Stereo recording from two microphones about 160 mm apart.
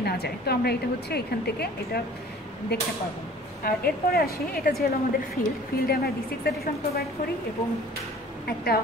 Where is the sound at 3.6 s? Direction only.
70° left (ahead or behind).